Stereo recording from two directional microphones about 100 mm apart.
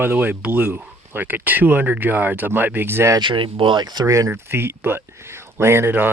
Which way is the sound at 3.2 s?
55° right (ahead or behind).